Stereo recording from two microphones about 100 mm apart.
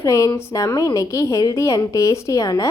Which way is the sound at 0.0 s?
35° left (ahead or behind).